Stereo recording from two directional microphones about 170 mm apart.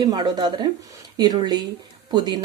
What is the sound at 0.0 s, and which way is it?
Speech, 25° right (ahead or behind).